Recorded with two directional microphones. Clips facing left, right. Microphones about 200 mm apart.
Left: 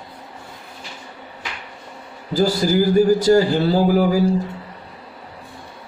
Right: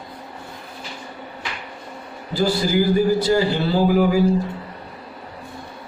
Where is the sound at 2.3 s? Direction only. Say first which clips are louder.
Left 2 dB; 40° left (ahead or behind).